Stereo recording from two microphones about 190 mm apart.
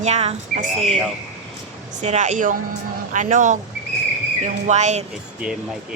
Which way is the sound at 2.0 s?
40° right (ahead or behind).